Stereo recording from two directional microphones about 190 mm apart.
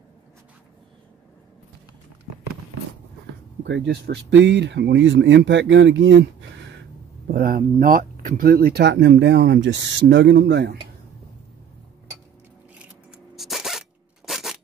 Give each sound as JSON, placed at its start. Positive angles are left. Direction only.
{"t": 3.6, "sound": "speech", "side_deg": -65}
{"t": 7.2, "sound": "speech", "side_deg": -50}
{"t": 13.4, "sound": "zipper", "side_deg": 0}